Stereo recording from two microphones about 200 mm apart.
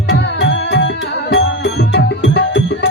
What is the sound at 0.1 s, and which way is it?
Music, 55° left (ahead or behind).